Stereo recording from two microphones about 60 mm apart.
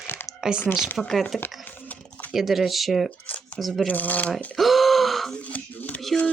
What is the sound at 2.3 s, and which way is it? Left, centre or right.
Speech, centre.